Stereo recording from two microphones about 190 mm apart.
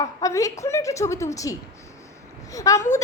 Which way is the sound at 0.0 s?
15° left (ahead or behind).